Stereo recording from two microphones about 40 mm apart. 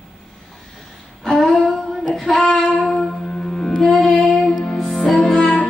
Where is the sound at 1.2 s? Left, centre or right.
Centre.